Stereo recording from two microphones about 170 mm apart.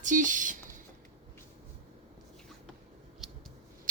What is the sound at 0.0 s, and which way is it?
Speech, 50° right (ahead or behind).